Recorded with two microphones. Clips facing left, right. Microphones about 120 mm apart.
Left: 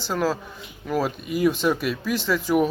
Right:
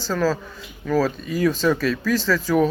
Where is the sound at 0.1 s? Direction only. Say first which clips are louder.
Right 2 dB; 15° left (ahead or behind).